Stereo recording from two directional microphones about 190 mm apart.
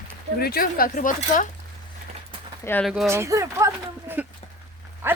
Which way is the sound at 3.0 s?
15° right (ahead or behind).